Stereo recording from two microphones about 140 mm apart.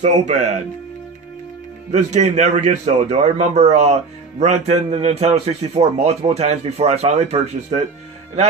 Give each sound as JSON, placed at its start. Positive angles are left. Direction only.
{"t": 0.0, "sound": "speech", "side_deg": -60}
{"t": 1.9, "sound": "speech", "side_deg": -55}